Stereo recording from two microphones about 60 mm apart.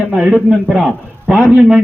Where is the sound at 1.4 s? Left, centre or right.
Right.